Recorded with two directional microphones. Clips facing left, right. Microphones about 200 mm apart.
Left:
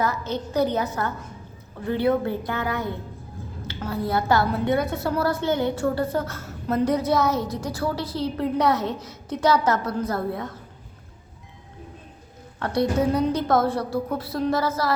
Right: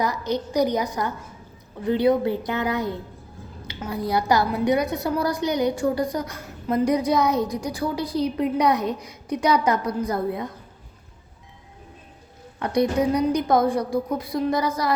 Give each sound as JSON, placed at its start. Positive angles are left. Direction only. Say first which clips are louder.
{"t": 0.0, "sound": "a woman's voice", "louder": "right 1 dB", "side_deg": -15}
{"t": 12.5, "sound": "a woman's voice", "louder": "right 1 dB", "side_deg": -15}